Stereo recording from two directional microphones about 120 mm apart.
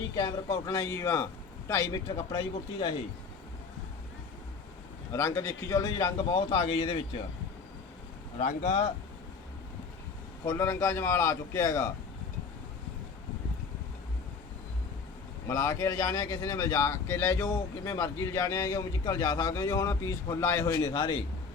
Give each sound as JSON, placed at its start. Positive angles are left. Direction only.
{"t": 0.2, "sound": "speech", "side_deg": 30}
{"t": 2.0, "sound": "a man's voice", "side_deg": 35}
{"t": 5.1, "sound": "speech", "side_deg": 25}
{"t": 6.3, "sound": "a man's voice", "side_deg": 45}
{"t": 8.4, "sound": "speech", "side_deg": 80}
{"t": 10.4, "sound": "speech", "side_deg": 20}
{"t": 15.4, "sound": "speech", "side_deg": 25}
{"t": 20.8, "sound": "a man's voice", "side_deg": 35}